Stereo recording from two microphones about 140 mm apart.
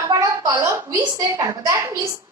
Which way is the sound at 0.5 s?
15° right (ahead or behind).